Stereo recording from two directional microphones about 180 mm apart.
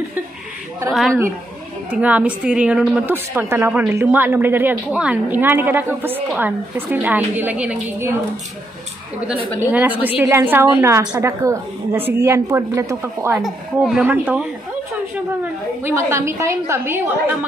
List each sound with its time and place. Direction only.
1.9 s a woman's voice: 10° right (ahead or behind)
9.6 s a woman's voice: 10° right (ahead or behind)
13.4 s a woman's voice: centre (ahead or behind)
15.8 s a woman's voice: 15° right (ahead or behind)